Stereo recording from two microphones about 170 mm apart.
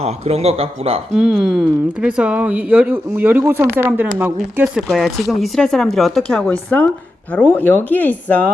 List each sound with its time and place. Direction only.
0.0 s speech: 35° right (ahead or behind)
1.1 s speech: 5° right (ahead or behind)